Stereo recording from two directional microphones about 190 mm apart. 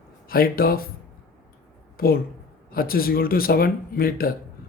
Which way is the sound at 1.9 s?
50° left (ahead or behind).